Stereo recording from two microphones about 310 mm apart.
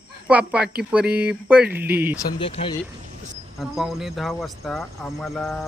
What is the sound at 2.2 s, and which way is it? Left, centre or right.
Speech, centre.